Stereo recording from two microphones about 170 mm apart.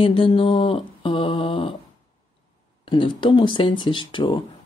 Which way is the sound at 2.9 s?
30° left (ahead or behind).